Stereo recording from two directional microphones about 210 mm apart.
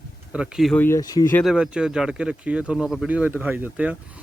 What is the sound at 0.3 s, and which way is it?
Speech, 5° right (ahead or behind).